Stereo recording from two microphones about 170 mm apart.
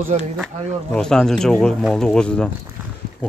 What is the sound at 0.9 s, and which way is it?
Speech, 5° left (ahead or behind).